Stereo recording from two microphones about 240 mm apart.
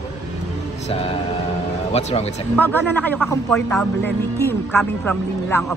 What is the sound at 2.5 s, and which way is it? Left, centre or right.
A man's voice, centre.